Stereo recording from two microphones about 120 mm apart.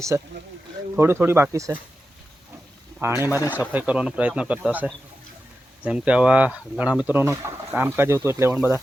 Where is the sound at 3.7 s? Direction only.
10° right (ahead or behind).